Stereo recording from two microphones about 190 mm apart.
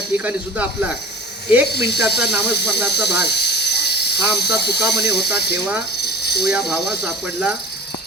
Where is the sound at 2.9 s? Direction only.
60° left (ahead or behind).